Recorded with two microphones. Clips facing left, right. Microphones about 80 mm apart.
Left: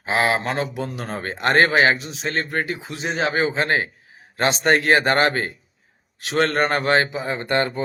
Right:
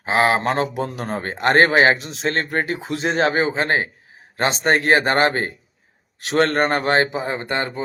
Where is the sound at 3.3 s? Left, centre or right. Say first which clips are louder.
Right 1 dB; right.